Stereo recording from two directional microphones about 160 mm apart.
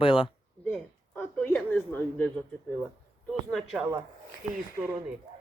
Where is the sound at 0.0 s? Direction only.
35° left (ahead or behind).